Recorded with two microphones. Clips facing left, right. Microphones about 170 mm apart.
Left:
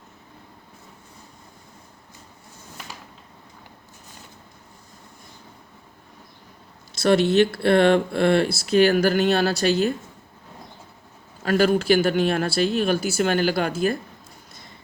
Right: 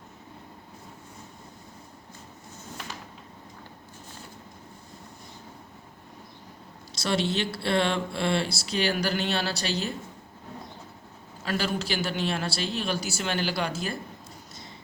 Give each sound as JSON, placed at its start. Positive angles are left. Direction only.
{"t": 6.9, "sound": "speech", "side_deg": 55}
{"t": 11.4, "sound": "speech", "side_deg": 50}